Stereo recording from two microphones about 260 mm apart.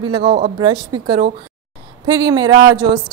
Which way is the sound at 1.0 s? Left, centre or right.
Right.